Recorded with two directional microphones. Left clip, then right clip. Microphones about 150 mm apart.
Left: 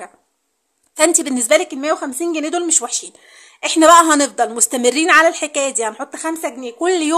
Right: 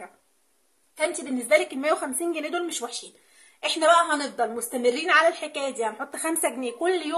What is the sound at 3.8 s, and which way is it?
Speech, 50° left (ahead or behind).